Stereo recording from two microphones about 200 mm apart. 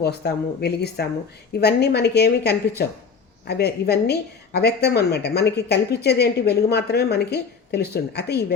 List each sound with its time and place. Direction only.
0.0 s a woman's voice: 55° left (ahead or behind)